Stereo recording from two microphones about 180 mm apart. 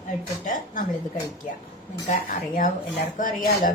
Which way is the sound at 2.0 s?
45° left (ahead or behind).